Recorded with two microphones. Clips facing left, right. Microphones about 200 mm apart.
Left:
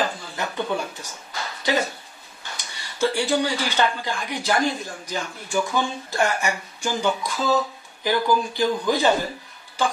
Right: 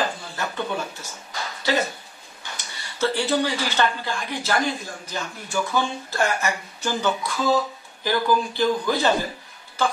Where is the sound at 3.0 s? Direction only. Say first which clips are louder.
Left 1 dB; 15° left (ahead or behind).